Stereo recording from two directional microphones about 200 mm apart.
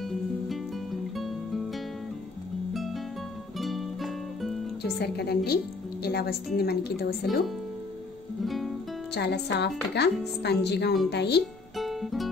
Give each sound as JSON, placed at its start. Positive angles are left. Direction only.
{"t": 0.0, "sound": "music", "side_deg": 0}
{"t": 4.8, "sound": "a woman's voice", "side_deg": 55}
{"t": 8.5, "sound": "music", "side_deg": 0}
{"t": 9.1, "sound": "a woman's voice", "side_deg": 55}
{"t": 11.7, "sound": "music", "side_deg": 0}